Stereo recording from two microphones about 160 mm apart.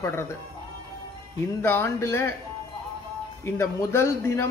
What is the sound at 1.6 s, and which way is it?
Speech, 15° left (ahead or behind).